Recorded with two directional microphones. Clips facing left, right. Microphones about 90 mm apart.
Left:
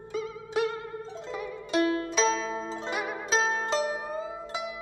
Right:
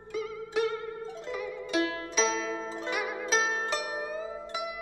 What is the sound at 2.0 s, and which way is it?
Music, 35° left (ahead or behind).